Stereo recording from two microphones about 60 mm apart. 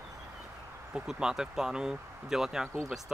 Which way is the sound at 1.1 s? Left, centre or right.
Centre.